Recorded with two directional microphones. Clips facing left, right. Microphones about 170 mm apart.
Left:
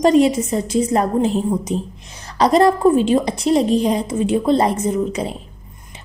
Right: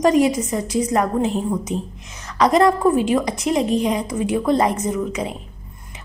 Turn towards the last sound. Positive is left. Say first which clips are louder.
# left 3 dB
turn(degrees=30)  # may be behind; listen again after turning